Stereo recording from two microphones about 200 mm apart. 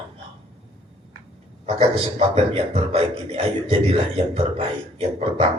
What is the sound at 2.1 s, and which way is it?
Speech, 30° right (ahead or behind).